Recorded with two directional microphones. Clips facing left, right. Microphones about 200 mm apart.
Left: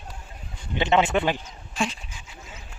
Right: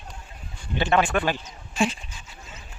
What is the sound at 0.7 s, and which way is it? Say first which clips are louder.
Speech: left 1 dB; 20° left (ahead or behind).